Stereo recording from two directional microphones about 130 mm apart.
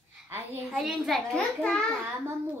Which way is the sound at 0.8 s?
Centre (ahead or behind).